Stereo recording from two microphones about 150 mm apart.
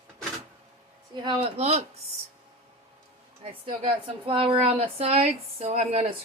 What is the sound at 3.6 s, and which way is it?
Speech, 35° right (ahead or behind).